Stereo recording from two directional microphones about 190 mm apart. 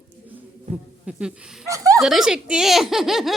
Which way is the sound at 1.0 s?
5° right (ahead or behind).